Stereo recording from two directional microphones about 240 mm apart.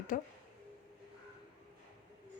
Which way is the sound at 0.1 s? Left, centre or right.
Left.